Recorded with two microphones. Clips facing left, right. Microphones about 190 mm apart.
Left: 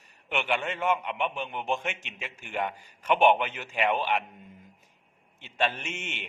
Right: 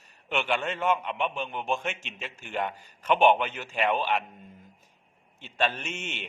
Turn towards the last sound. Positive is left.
turn(degrees=15)  # may be behind; listen again after turning